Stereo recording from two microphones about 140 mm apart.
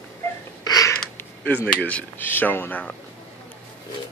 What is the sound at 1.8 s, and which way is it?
Speech, 10° left (ahead or behind).